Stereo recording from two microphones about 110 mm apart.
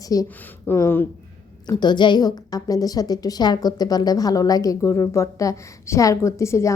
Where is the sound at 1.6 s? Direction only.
40° left (ahead or behind).